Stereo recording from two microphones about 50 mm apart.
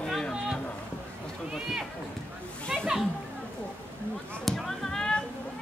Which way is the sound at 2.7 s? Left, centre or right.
Centre.